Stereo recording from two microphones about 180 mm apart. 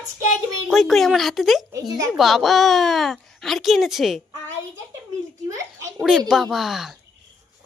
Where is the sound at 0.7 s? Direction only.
Centre (ahead or behind).